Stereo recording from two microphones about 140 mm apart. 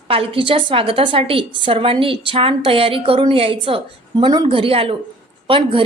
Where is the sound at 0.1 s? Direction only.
40° right (ahead or behind).